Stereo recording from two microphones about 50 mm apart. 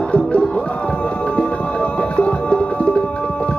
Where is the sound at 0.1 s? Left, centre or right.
Left.